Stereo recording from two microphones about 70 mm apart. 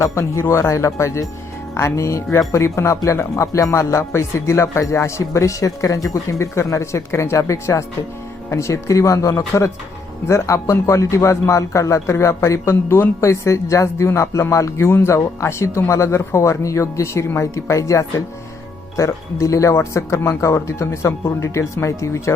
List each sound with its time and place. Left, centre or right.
0.0 s a man's voice: left